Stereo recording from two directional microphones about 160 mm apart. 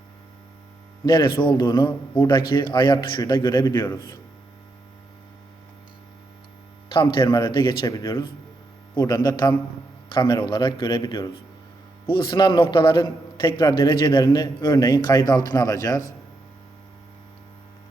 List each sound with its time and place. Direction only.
1.0 s a man's voice: 30° left (ahead or behind)
6.8 s a man's voice: 30° left (ahead or behind)